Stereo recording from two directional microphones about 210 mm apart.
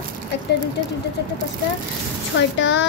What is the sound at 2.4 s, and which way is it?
Child singing, 60° left (ahead or behind).